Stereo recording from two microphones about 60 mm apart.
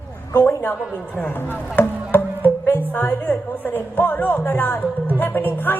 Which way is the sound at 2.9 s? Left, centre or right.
Left.